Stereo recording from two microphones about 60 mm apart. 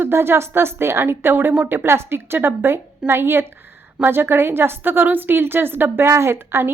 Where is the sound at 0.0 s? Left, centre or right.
Right.